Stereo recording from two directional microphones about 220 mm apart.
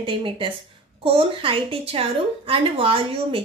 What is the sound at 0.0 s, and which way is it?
Speech, 20° right (ahead or behind).